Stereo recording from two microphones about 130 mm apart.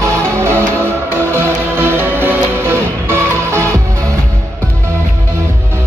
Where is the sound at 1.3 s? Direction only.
20° right (ahead or behind).